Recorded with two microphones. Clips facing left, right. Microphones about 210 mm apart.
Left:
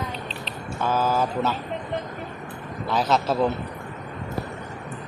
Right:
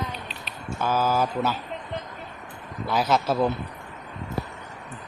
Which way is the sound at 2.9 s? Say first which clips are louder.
Left 1 dB; 10° right (ahead or behind).